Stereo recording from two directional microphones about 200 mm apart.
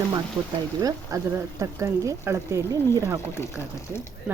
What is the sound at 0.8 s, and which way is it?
A woman's voice, 15° right (ahead or behind).